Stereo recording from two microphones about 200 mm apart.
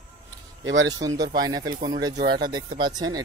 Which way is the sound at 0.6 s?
65° right (ahead or behind).